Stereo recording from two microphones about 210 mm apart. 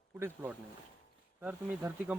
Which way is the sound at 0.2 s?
10° right (ahead or behind).